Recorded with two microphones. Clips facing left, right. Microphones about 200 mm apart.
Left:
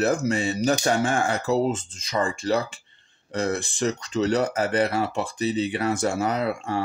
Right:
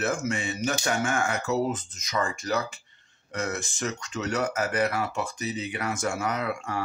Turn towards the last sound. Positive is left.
turn(degrees=30)  # may be behind; listen again after turning